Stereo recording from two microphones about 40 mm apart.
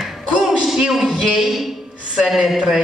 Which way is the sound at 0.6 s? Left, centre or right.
Centre.